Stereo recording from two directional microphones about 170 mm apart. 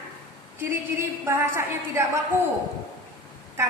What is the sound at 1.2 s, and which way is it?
Speech, 15° right (ahead or behind).